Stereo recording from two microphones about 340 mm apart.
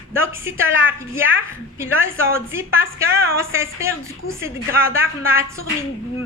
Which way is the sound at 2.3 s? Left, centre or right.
Centre.